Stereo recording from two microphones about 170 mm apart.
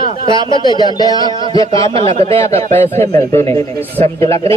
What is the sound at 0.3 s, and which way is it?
A man's voice, 25° left (ahead or behind).